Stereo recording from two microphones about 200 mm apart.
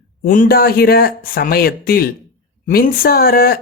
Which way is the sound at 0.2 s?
45° left (ahead or behind).